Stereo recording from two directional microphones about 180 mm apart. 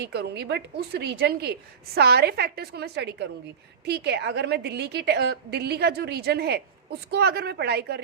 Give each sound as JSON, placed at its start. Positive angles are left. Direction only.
{"t": 0.0, "sound": "a woman's voice", "side_deg": -70}